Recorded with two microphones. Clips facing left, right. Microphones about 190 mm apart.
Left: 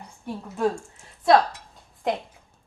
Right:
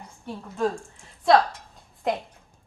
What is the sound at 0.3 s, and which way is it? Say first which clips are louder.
Speech: left 2 dB; 10° left (ahead or behind).